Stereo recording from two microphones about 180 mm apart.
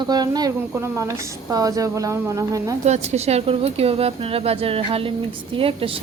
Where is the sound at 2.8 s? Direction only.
40° right (ahead or behind).